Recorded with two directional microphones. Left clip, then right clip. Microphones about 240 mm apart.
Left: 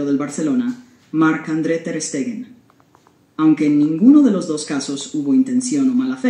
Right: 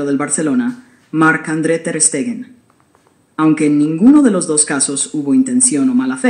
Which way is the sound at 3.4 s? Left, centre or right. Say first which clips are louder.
Right 2 dB; right.